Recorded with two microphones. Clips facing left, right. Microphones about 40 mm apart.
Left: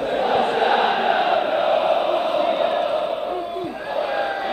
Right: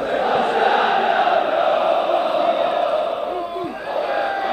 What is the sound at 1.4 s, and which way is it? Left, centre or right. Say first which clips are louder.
Chant: right 1 dB; centre.